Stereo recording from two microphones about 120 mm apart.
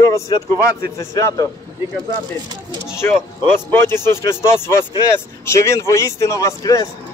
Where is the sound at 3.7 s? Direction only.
20° left (ahead or behind).